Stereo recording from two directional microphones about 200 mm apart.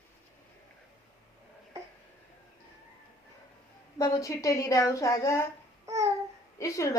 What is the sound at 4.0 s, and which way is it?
A woman's voice, 15° left (ahead or behind).